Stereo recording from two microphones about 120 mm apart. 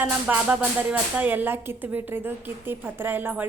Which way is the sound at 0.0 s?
15° right (ahead or behind).